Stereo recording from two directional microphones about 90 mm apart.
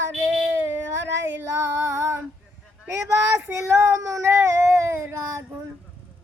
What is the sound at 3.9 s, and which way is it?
Speech, 35° right (ahead or behind).